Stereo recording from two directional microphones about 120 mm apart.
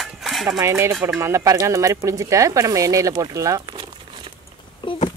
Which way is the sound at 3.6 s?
40° right (ahead or behind).